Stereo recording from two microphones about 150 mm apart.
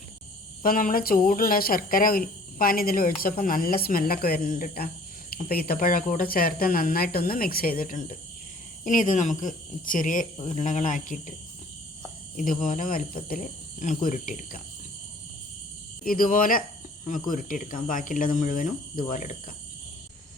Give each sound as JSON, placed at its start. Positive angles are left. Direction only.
{"t": 0.6, "sound": "speech", "side_deg": 70}
{"t": 10.4, "sound": "speech", "side_deg": 50}
{"t": 12.4, "sound": "speech", "side_deg": 60}
{"t": 16.0, "sound": "speech", "side_deg": 65}